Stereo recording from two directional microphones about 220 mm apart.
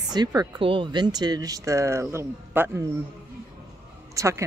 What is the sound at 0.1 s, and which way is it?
Speech, 20° right (ahead or behind).